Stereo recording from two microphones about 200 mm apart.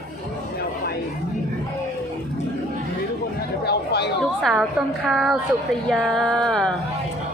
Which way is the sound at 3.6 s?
55° left (ahead or behind).